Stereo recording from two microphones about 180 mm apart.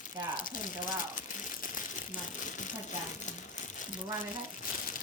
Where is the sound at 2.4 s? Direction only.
45° left (ahead or behind).